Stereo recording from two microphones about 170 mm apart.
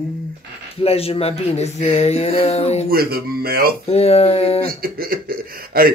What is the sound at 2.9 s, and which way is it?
Speech, 65° right (ahead or behind).